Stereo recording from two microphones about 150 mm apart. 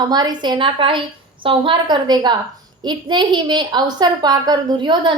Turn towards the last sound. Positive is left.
turn(degrees=-30)  # may be behind; listen again after turning